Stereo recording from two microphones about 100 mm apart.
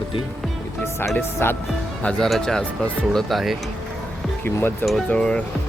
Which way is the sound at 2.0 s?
10° left (ahead or behind).